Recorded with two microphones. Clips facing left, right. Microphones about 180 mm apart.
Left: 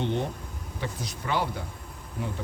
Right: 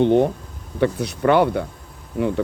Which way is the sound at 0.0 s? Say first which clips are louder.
Right 13 dB; 55° right (ahead or behind).